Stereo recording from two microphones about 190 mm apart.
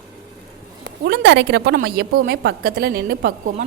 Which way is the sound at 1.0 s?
65° right (ahead or behind).